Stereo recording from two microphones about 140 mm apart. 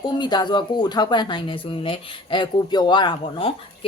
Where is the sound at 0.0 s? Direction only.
30° left (ahead or behind).